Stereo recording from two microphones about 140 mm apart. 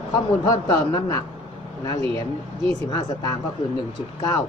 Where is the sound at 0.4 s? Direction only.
30° left (ahead or behind).